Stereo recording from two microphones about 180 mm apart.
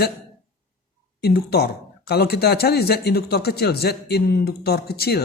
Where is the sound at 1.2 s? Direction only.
60° left (ahead or behind).